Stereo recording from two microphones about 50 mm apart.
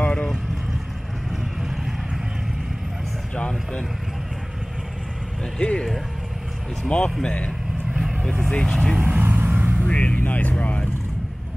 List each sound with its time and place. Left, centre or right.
0.0 s vehicle: left
3.3 s speech: centre
5.6 s speech: left
6.9 s speech: left
8.5 s speech: centre
9.0 s vehicle: right
9.8 s speech: left
10.2 s speech: left
10.5 s speech: left